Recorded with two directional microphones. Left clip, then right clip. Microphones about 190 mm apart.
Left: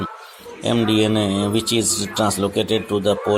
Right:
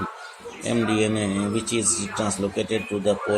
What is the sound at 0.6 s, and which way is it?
Speech, 45° left (ahead or behind).